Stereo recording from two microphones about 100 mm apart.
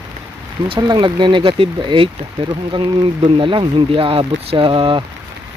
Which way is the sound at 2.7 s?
55° right (ahead or behind).